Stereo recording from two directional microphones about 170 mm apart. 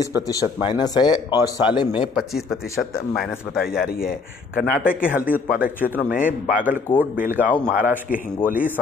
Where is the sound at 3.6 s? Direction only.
60° left (ahead or behind).